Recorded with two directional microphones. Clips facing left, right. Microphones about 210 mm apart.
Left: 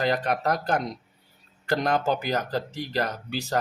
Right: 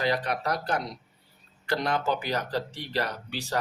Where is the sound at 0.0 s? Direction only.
45° left (ahead or behind).